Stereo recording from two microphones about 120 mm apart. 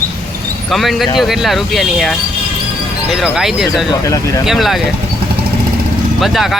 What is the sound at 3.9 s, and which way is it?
Speech, 30° left (ahead or behind).